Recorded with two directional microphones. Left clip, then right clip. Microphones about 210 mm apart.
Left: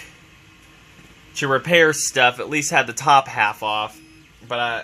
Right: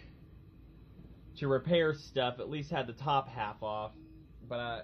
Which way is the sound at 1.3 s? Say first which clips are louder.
Left 14 dB; 55° left (ahead or behind).